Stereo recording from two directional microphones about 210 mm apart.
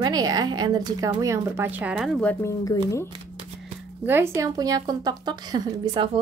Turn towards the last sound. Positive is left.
turn(degrees=-20)  # may be behind; listen again after turning